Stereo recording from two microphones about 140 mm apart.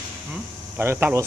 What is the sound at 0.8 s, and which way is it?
Speech, 15° right (ahead or behind).